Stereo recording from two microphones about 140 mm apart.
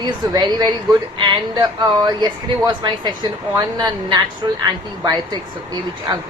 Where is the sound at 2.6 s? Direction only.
30° right (ahead or behind).